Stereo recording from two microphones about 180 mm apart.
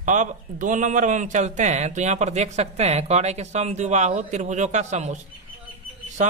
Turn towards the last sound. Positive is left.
turn(degrees=-40)  # may be behind; listen again after turning